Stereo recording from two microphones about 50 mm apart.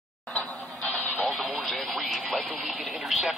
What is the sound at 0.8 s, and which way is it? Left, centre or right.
Music, left.